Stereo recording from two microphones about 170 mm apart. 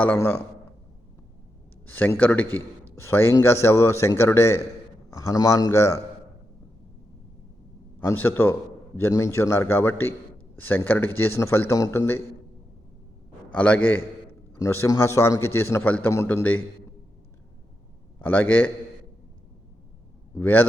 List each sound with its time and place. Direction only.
0.0 s a man's voice: 10° left (ahead or behind)
1.9 s a man's voice: 10° left (ahead or behind)
7.9 s a man's voice: 10° left (ahead or behind)
13.5 s a man's voice: 10° left (ahead or behind)
18.2 s a man's voice: 10° left (ahead or behind)
20.4 s a man's voice: 10° left (ahead or behind)